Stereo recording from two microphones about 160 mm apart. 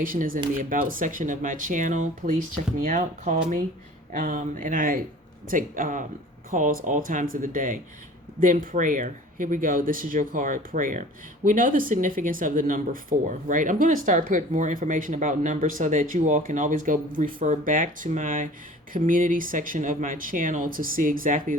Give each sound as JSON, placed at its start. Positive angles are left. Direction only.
{"t": 0.0, "sound": "speech", "side_deg": -60}